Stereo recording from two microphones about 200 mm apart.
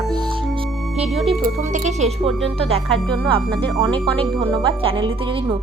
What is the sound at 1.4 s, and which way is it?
Speech, 35° right (ahead or behind).